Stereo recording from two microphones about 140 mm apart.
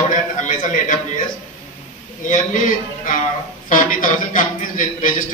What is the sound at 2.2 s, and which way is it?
A man's voice, 65° left (ahead or behind).